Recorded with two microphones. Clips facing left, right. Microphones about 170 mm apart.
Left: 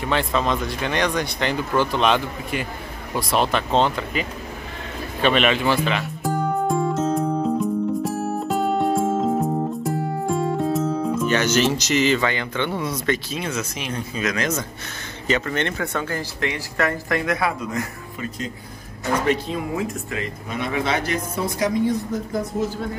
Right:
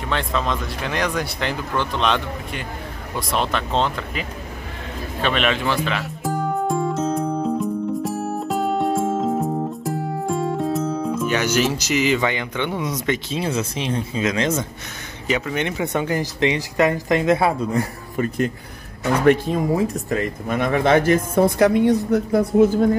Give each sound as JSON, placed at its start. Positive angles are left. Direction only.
{"t": 0.1, "sound": "speech", "side_deg": 5}
{"t": 5.2, "sound": "music", "side_deg": 5}
{"t": 11.2, "sound": "speech", "side_deg": -10}
{"t": 13.4, "sound": "speech", "side_deg": -30}
{"t": 15.2, "sound": "speech", "side_deg": -10}
{"t": 18.1, "sound": "speech", "side_deg": -50}
{"t": 19.7, "sound": "speech", "side_deg": -35}
{"t": 20.2, "sound": "speech", "side_deg": -50}